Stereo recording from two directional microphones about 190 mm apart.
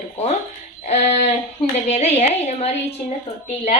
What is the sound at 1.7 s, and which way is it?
A woman's voice, 35° left (ahead or behind).